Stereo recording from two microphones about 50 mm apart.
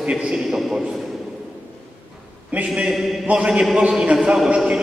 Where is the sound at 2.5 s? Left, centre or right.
Right.